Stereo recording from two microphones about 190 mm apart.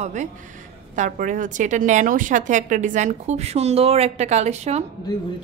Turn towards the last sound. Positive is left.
turn(degrees=20)  # may be behind; listen again after turning